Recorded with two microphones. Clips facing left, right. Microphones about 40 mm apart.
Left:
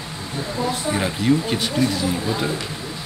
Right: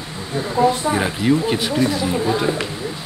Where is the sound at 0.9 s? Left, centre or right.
Centre.